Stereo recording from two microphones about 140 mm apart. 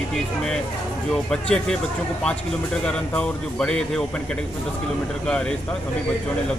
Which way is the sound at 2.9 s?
5° left (ahead or behind).